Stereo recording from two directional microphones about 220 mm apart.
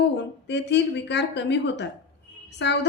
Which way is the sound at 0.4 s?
50° left (ahead or behind).